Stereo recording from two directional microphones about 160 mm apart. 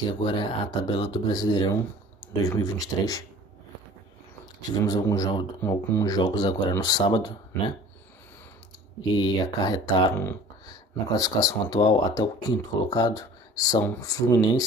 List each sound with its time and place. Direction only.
0.2 s speech: 30° left (ahead or behind)
4.7 s speech: 25° left (ahead or behind)
9.1 s speech: 25° left (ahead or behind)
11.1 s speech: 20° left (ahead or behind)